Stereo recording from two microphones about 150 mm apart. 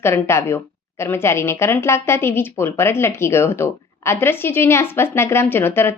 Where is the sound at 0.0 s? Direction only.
15° left (ahead or behind).